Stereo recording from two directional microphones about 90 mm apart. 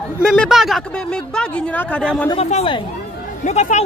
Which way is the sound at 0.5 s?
Centre (ahead or behind).